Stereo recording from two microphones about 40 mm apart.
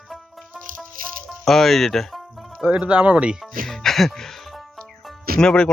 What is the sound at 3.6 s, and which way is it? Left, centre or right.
Music, centre.